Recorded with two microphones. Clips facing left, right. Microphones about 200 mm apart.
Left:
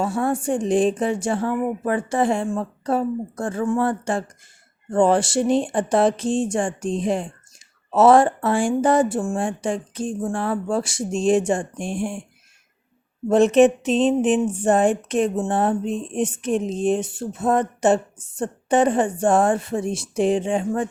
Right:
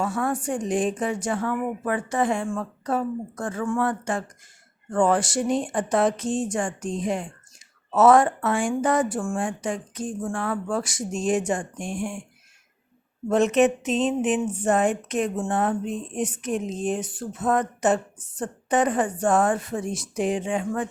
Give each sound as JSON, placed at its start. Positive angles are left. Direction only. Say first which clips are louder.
{"t": 0.0, "sound": "speech", "louder": "left 4 dB", "side_deg": 30}
{"t": 13.2, "sound": "speech", "louder": "left 5 dB", "side_deg": 30}